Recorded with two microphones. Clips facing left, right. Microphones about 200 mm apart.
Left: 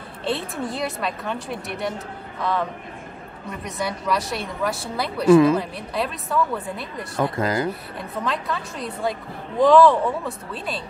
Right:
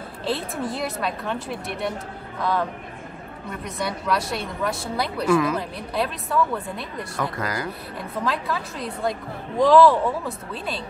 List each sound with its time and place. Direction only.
0.2 s a woman's voice: centre (ahead or behind)
3.6 s a woman's voice: centre (ahead or behind)
5.2 s speech: 25° left (ahead or behind)
5.6 s a woman's voice: centre (ahead or behind)
7.3 s speech: 25° left (ahead or behind)
8.0 s a woman's voice: centre (ahead or behind)